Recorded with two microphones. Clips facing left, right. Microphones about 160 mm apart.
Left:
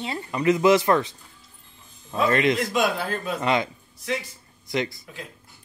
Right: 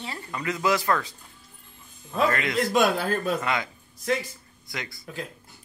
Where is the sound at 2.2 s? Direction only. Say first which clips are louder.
Left 3 dB; 25° left (ahead or behind).